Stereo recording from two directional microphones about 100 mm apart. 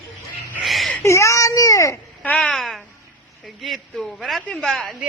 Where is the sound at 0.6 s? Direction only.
Centre (ahead or behind).